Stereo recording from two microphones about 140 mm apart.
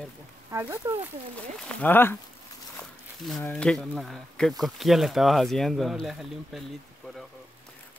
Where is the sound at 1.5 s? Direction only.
10° left (ahead or behind).